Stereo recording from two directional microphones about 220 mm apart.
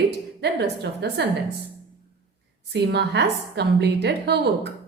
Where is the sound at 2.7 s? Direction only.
50° right (ahead or behind).